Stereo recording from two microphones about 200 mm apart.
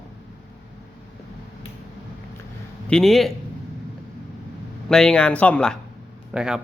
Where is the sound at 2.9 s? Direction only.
Centre (ahead or behind).